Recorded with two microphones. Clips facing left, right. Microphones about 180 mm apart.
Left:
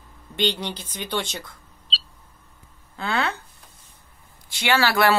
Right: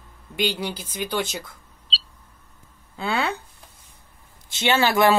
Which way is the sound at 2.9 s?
15° right (ahead or behind).